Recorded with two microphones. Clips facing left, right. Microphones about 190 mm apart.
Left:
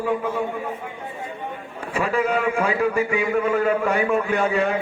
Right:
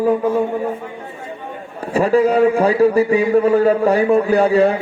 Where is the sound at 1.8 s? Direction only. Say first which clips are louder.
Right 9 dB; 35° right (ahead or behind).